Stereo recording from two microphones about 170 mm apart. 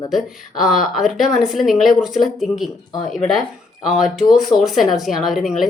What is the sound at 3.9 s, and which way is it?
Speech, centre (ahead or behind).